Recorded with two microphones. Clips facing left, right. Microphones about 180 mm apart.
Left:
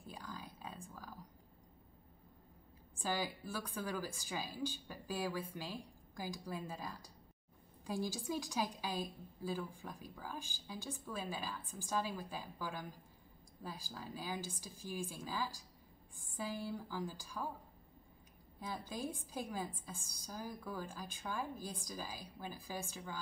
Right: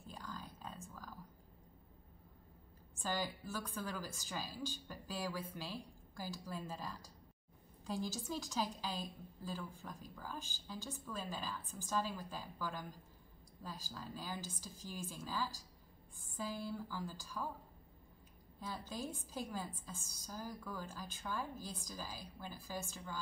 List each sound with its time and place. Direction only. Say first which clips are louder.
0.0 s a sound: even; 10° left (ahead or behind)
3.0 s a woman's voice: left 1 dB; 10° left (ahead or behind)
18.6 s a woman's voice: left 2 dB; 10° left (ahead or behind)